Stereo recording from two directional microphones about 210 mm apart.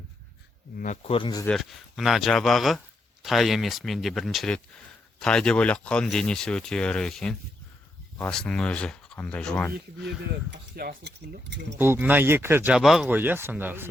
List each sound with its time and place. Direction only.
0.8 s speech: 35° left (ahead or behind)
1.5 s speech: centre (ahead or behind)
10.5 s speech: 50° right (ahead or behind)
11.8 s speech: 10° right (ahead or behind)